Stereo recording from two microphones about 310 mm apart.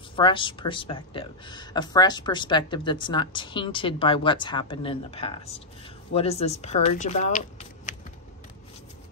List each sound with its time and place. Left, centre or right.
0.1 s speech: centre